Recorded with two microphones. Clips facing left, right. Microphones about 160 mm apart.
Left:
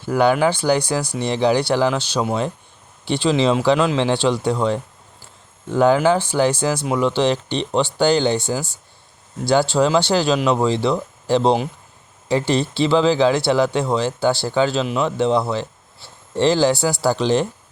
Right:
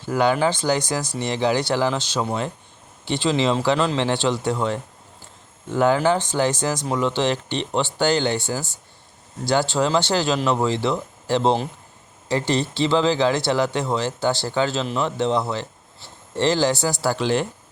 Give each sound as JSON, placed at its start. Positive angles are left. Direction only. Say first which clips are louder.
{"t": 0.2, "sound": "speech", "louder": "left 3 dB", "side_deg": 15}
{"t": 5.8, "sound": "speech", "louder": "left 3 dB", "side_deg": 15}